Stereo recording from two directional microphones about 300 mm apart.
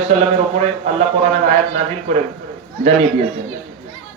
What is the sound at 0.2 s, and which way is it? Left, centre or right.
Speech, right.